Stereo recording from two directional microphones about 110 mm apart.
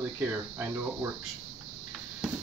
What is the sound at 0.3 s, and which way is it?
Speech, 20° right (ahead or behind).